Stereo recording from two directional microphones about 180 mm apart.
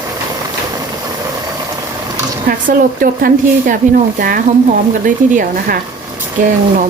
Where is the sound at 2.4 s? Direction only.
50° right (ahead or behind).